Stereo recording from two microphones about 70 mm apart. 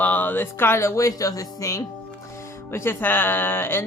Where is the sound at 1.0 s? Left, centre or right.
Left.